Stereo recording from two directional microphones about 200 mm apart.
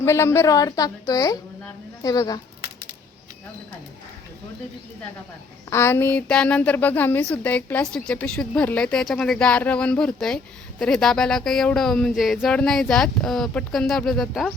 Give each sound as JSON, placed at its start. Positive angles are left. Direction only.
{"t": 0.0, "sound": "a woman's voice", "side_deg": 15}
{"t": 5.7, "sound": "a woman's voice", "side_deg": 10}